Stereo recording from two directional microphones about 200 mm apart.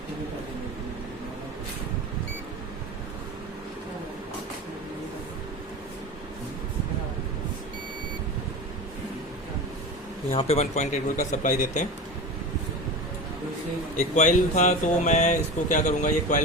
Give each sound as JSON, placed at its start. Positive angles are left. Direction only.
{"t": 10.3, "sound": "speech", "side_deg": 35}
{"t": 13.9, "sound": "speech", "side_deg": 40}